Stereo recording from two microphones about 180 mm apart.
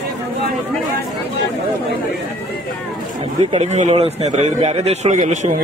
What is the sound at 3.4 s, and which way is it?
A man's voice, 40° right (ahead or behind).